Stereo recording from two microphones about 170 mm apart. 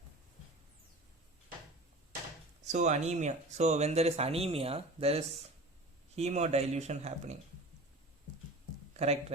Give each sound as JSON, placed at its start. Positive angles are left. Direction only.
{"t": 2.6, "sound": "speech", "side_deg": -45}